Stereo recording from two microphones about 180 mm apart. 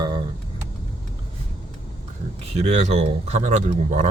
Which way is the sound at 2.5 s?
35° right (ahead or behind).